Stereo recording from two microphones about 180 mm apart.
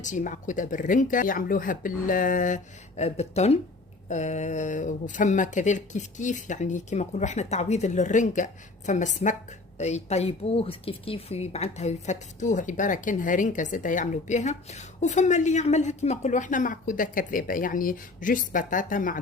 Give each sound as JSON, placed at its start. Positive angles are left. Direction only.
{"t": 0.0, "sound": "speech", "side_deg": 45}